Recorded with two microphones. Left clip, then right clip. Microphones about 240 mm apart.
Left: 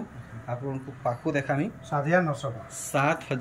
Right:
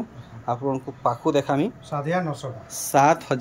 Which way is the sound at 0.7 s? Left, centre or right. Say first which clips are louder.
Right 5 dB; centre.